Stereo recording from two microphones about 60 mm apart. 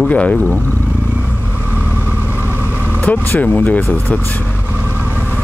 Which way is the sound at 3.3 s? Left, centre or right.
Left.